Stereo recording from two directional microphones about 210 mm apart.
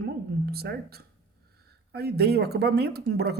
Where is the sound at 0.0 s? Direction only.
50° right (ahead or behind).